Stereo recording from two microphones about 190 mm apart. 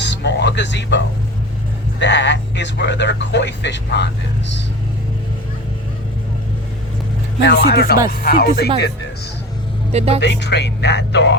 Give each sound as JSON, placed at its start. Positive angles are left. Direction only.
{"t": 0.0, "sound": "music", "side_deg": 65}
{"t": 2.0, "sound": "speech", "side_deg": 70}
{"t": 7.4, "sound": "speech", "side_deg": 55}
{"t": 10.2, "sound": "speech", "side_deg": 65}